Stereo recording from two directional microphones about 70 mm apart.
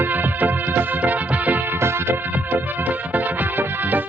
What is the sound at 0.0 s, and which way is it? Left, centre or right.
Music, right.